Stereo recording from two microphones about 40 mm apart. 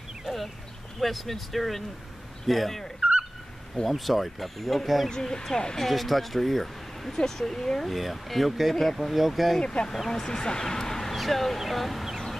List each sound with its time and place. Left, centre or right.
0.2 s a sound: centre
0.9 s speech: centre
3.9 s speech: centre
5.1 s speech: centre
5.8 s speech: centre
7.9 s speech: centre
9.6 s speech: centre